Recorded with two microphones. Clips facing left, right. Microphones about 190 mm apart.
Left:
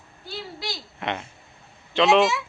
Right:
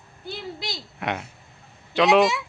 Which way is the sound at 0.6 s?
10° right (ahead or behind).